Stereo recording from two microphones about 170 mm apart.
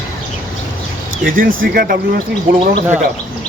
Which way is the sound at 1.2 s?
55° right (ahead or behind).